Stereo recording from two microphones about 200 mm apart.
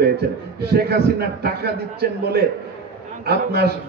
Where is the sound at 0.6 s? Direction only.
50° right (ahead or behind).